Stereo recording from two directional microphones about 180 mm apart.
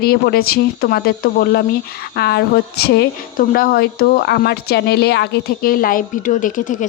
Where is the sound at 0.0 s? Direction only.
55° left (ahead or behind).